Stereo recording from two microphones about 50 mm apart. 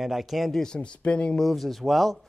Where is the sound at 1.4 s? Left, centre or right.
Centre.